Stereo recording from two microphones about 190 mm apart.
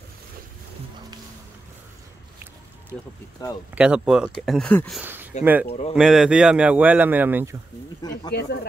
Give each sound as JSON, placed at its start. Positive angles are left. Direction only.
{"t": 3.4, "sound": "speech", "side_deg": 20}
{"t": 3.7, "sound": "speech", "side_deg": -5}
{"t": 5.0, "sound": "a sound", "side_deg": -10}
{"t": 5.4, "sound": "speech", "side_deg": -10}
{"t": 8.3, "sound": "speech", "side_deg": 60}